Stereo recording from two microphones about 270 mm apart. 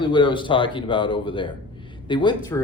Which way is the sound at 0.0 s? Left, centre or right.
Centre.